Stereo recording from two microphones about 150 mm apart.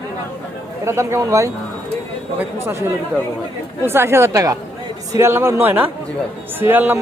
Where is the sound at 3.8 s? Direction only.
15° right (ahead or behind).